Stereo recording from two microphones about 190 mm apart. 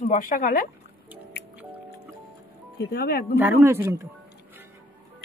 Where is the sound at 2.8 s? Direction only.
55° left (ahead or behind).